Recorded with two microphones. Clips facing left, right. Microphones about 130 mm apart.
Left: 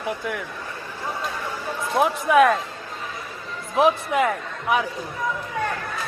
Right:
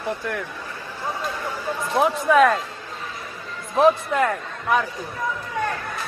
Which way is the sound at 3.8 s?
15° left (ahead or behind).